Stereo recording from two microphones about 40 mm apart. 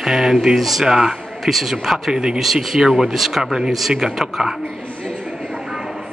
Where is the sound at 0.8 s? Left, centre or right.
Centre.